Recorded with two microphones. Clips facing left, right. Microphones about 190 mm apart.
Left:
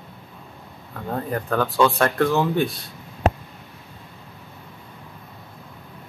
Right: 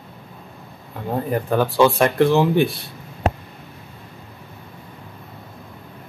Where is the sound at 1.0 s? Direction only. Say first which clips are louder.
Right 4 dB; 10° right (ahead or behind).